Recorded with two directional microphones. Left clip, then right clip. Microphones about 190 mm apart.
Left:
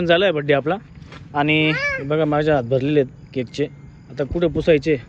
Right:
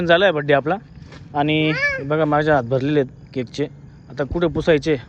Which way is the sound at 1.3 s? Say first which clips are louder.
Left 1 dB; 15° left (ahead or behind).